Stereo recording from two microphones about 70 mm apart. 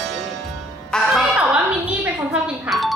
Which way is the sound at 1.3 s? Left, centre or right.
Centre.